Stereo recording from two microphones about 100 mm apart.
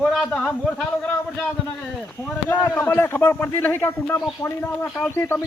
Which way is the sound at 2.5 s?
20° left (ahead or behind).